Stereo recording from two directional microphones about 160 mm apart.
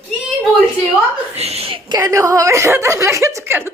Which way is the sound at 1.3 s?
40° right (ahead or behind).